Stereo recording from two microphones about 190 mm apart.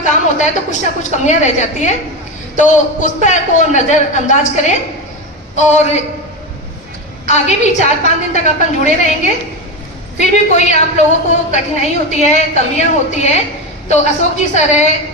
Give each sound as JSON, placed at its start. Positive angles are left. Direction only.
{"t": 0.0, "sound": "a woman's voice", "side_deg": 40}
{"t": 7.3, "sound": "a woman's voice", "side_deg": 35}
{"t": 10.2, "sound": "a woman's voice", "side_deg": 35}